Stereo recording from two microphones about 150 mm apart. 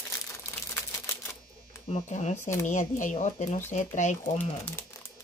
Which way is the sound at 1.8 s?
50° left (ahead or behind).